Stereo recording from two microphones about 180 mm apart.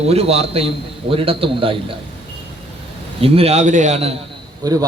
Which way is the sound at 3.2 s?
35° right (ahead or behind).